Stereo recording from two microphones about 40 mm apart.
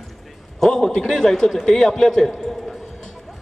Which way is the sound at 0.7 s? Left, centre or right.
Centre.